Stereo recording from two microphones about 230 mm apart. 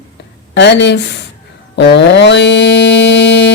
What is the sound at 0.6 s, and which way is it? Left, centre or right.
Speech, left.